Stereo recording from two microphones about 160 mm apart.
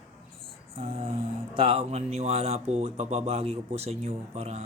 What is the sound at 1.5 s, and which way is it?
Speech, 35° right (ahead or behind).